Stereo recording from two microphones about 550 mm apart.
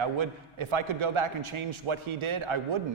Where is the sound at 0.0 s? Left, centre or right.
Right.